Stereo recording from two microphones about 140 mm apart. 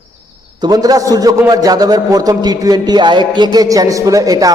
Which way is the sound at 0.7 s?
25° right (ahead or behind).